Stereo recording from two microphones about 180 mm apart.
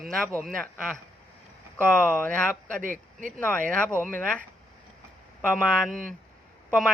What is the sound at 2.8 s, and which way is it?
Speech, 45° right (ahead or behind).